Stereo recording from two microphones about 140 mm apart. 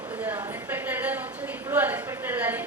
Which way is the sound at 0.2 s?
10° right (ahead or behind).